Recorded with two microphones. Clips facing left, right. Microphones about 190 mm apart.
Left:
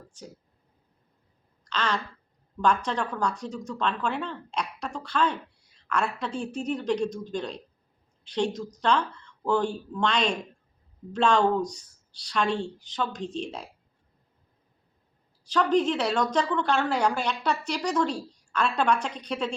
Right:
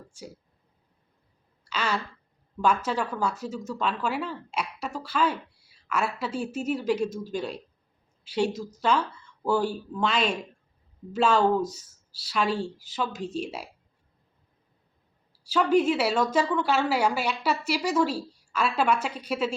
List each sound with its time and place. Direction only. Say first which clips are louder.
0.1 s a woman's voice: right 2 dB; 10° right (ahead or behind)
1.6 s a sound: even; 10° right (ahead or behind)
2.6 s a woman's voice: even; 5° right (ahead or behind)
15.4 s a woman's voice: right 1 dB; 10° right (ahead or behind)